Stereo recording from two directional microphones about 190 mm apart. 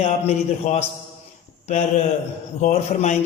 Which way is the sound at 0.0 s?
35° left (ahead or behind).